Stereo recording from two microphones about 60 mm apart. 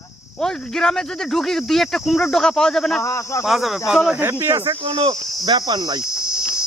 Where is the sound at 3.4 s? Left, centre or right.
Centre.